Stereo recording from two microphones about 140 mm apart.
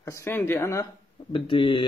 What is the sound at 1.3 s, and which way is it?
Speech, 40° left (ahead or behind).